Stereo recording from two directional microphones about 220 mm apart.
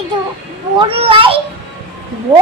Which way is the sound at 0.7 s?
25° right (ahead or behind).